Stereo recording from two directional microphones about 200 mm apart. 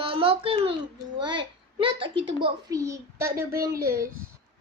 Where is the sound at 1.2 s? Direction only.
25° right (ahead or behind).